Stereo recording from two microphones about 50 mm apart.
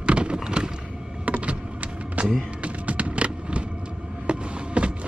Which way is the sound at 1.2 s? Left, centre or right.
Right.